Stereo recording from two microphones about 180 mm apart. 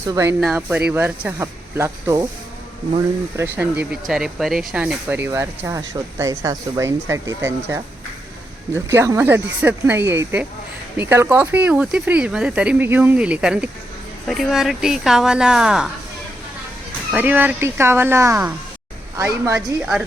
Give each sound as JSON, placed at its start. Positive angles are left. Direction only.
{"t": 0.1, "sound": "speech", "side_deg": -15}
{"t": 0.3, "sound": "speech", "side_deg": -5}
{"t": 3.3, "sound": "speech", "side_deg": -10}
{"t": 17.1, "sound": "speech", "side_deg": -10}